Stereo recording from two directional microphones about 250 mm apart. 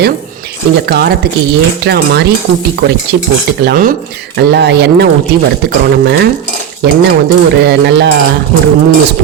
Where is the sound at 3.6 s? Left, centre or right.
Right.